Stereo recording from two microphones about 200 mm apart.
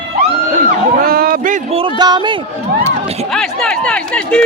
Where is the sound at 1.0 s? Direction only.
50° right (ahead or behind).